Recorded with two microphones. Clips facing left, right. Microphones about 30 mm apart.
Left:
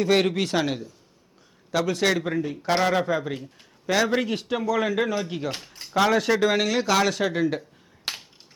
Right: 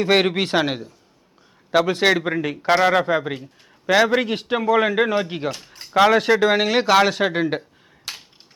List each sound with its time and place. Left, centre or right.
0.0 s a man's voice: right
3.3 s speech: centre
3.9 s a man's voice: right
8.1 s finger snapping: left